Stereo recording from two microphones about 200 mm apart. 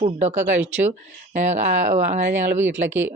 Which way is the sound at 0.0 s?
35° right (ahead or behind).